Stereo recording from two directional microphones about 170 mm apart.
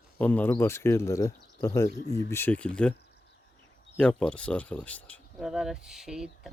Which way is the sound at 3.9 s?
5° left (ahead or behind).